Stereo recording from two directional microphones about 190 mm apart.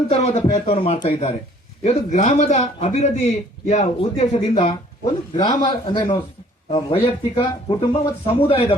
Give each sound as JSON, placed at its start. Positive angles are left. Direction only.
{"t": 0.1, "sound": "speech", "side_deg": 35}